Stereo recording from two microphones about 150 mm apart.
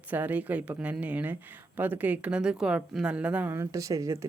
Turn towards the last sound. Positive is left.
turn(degrees=-20)  # may be behind; listen again after turning